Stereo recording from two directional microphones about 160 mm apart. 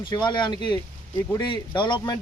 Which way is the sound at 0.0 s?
25° left (ahead or behind).